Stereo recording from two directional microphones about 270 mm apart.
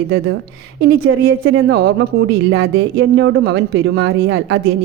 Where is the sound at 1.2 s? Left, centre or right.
Right.